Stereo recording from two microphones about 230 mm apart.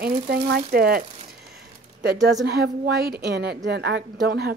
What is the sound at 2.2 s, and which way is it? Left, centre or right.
A woman's voice, right.